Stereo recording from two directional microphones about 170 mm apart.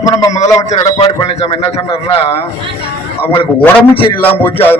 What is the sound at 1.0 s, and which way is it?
A man's voice, 35° left (ahead or behind).